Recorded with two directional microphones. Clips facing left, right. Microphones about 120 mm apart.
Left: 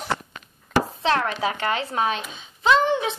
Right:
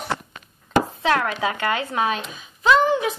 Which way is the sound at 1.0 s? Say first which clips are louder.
Right 1 dB; 30° left (ahead or behind).